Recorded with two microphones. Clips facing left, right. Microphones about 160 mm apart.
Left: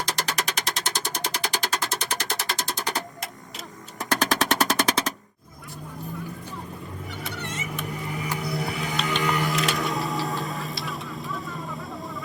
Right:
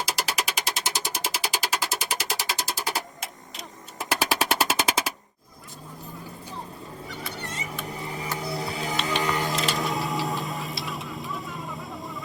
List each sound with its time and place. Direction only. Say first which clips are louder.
0.0 s a sound: even; 10° right (ahead or behind)
3.9 s music: left 2 dB; 10° right (ahead or behind)
8.7 s music: even; 35° right (ahead or behind)
9.6 s vehicle: left 1 dB; centre (ahead or behind)